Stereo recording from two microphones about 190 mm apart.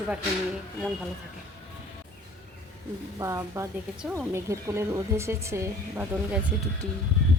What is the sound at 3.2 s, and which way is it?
Speech, 15° right (ahead or behind).